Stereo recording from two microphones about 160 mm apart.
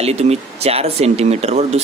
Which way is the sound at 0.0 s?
40° right (ahead or behind).